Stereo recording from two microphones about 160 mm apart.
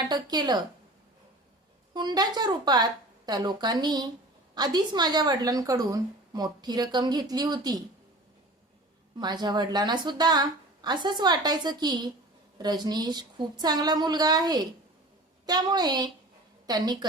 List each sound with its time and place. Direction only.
0.1 s a woman's voice: 25° right (ahead or behind)
1.9 s a woman's voice: 25° right (ahead or behind)
9.1 s a woman's voice: 25° right (ahead or behind)